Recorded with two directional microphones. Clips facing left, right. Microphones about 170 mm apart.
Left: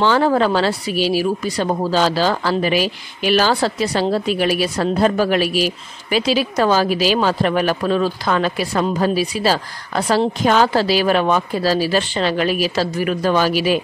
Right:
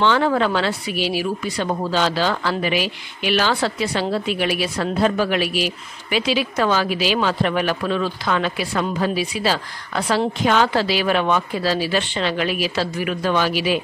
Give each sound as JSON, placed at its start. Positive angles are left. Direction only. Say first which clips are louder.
{"t": 0.0, "sound": "a woman's voice", "louder": "left 3 dB", "side_deg": 35}